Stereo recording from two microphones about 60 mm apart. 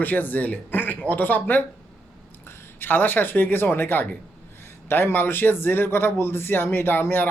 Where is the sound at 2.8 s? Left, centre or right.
Left.